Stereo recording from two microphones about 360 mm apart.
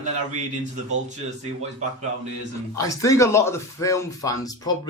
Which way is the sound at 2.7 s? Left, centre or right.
Centre.